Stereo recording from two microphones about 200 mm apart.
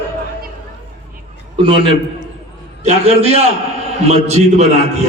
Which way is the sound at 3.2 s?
30° right (ahead or behind).